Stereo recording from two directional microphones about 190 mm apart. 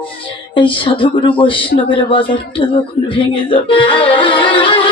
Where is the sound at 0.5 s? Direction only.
25° left (ahead or behind).